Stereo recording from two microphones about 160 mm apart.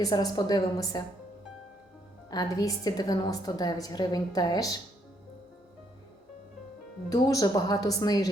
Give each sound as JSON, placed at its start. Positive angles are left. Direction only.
{"t": 0.0, "sound": "a woman's voice", "side_deg": 25}
{"t": 2.3, "sound": "a woman's voice", "side_deg": 25}
{"t": 7.1, "sound": "a woman's voice", "side_deg": 20}